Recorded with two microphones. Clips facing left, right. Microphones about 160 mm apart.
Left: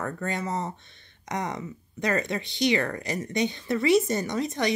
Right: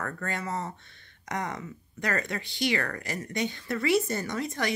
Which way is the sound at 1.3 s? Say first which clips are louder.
Left 2 dB; 20° left (ahead or behind).